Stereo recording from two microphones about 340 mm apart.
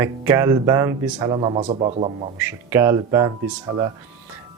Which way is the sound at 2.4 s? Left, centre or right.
Centre.